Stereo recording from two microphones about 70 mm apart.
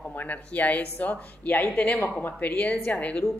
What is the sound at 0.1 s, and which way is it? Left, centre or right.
Speech, left.